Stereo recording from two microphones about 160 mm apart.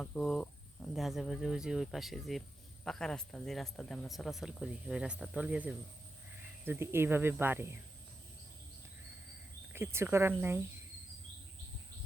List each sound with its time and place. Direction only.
0.0 s speech: 5° left (ahead or behind); by 7.8 s 15° right (ahead or behind)
9.7 s speech: 15° right (ahead or behind)